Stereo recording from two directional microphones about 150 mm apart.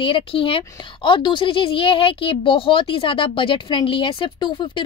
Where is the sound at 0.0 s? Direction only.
35° left (ahead or behind).